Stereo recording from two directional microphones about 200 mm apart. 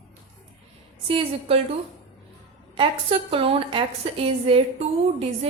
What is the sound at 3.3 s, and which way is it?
A woman's voice, 25° right (ahead or behind).